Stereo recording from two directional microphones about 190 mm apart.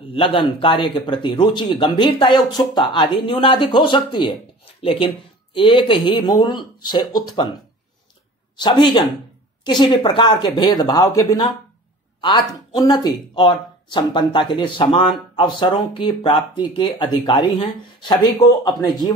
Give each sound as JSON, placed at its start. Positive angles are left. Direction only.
{"t": 0.1, "sound": "speech", "side_deg": 30}
{"t": 8.5, "sound": "speech", "side_deg": 25}